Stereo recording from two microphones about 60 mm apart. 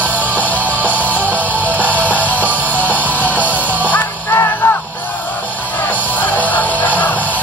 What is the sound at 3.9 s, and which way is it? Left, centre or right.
Music, left.